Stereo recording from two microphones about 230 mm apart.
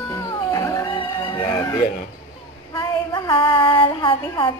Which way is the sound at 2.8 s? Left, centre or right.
Left.